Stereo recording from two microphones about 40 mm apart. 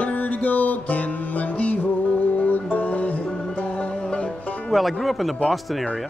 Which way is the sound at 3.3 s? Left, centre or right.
Centre.